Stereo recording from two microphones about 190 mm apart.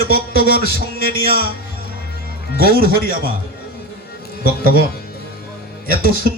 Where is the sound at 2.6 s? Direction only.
50° right (ahead or behind).